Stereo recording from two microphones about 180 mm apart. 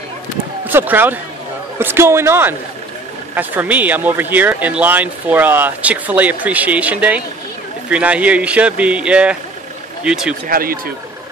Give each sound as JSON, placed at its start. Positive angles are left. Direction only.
{"t": 0.7, "sound": "speech", "side_deg": -10}
{"t": 10.5, "sound": "speech", "side_deg": -55}